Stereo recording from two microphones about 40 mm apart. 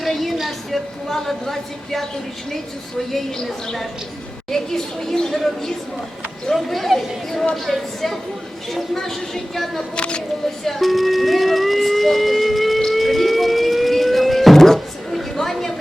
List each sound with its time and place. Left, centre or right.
0.0 s a sound: centre
1.1 s a woman's voice: centre
3.1 s a woman's voice: centre
6.5 s a woman's voice: centre
9.9 s speech: left
10.7 s a sound: centre
12.9 s music: centre